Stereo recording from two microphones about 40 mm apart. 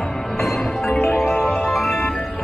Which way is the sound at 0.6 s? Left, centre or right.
Centre.